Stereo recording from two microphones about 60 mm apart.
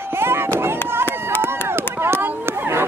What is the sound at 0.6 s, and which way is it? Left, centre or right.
Chop, right.